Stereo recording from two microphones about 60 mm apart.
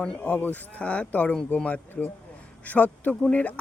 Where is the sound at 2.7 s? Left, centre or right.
Left.